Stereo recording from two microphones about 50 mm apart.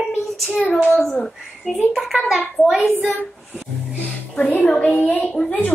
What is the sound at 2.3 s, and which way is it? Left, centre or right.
Speech, centre.